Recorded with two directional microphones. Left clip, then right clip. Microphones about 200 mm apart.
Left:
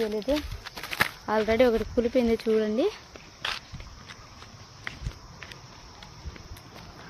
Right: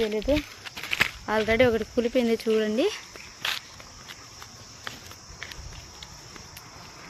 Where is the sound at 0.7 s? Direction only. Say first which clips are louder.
Right 2 dB; 20° left (ahead or behind).